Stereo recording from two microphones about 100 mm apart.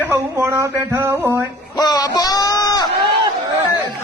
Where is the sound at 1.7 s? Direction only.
40° left (ahead or behind).